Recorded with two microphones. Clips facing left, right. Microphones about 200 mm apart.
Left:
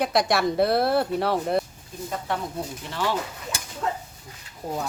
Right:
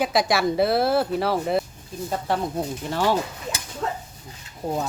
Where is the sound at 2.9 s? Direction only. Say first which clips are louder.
Right 5 dB; 45° right (ahead or behind).